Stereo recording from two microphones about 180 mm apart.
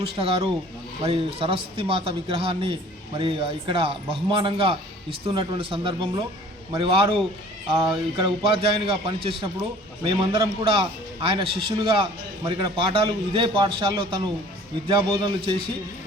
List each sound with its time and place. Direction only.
0.0 s a man's voice: 30° right (ahead or behind)